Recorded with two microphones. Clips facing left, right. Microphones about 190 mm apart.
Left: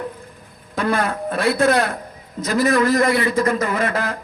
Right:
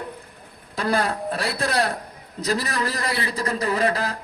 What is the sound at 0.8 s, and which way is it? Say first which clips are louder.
A man's voice: left 2 dB; 35° right (ahead or behind).